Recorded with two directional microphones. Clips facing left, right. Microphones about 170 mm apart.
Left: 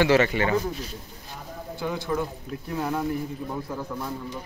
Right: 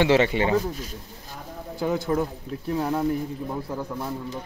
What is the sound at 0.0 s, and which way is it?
Speech, 25° right (ahead or behind).